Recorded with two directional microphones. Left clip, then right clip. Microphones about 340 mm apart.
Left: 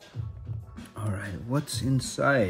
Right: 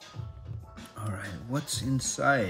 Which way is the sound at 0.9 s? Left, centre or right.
Centre.